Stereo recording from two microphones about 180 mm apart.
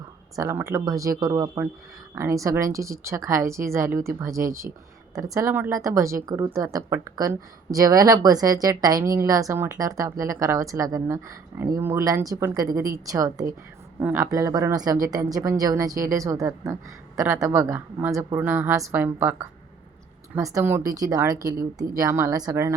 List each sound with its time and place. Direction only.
0.3 s a woman's voice: 15° right (ahead or behind)